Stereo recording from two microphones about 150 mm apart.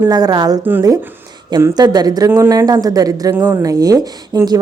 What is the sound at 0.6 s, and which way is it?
Speech, 15° right (ahead or behind).